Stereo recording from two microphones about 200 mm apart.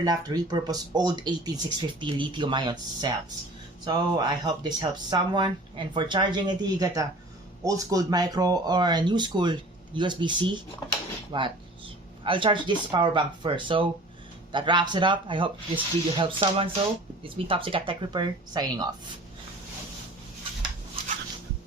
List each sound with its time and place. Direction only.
0.0 s speech: 20° right (ahead or behind)